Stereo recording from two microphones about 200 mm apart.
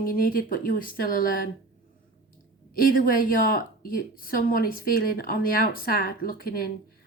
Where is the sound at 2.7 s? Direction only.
45° left (ahead or behind).